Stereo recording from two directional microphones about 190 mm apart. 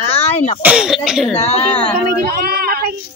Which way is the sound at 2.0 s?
50° right (ahead or behind).